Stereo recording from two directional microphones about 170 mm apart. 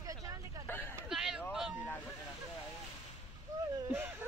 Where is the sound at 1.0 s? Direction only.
Centre (ahead or behind).